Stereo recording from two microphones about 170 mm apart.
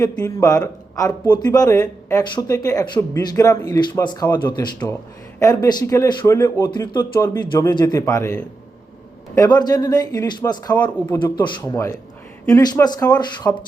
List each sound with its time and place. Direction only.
0.0 s speech: 20° left (ahead or behind)
9.4 s speech: 25° left (ahead or behind)